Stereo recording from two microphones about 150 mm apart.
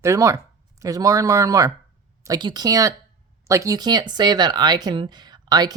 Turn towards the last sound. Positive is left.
turn(degrees=-25)  # may be behind; listen again after turning